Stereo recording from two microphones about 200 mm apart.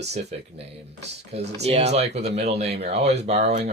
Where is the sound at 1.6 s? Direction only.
30° right (ahead or behind).